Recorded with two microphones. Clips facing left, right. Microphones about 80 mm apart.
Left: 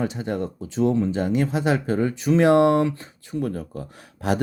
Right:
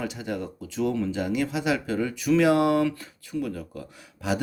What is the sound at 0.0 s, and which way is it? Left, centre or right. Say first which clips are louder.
Speech: left 5 dB; left.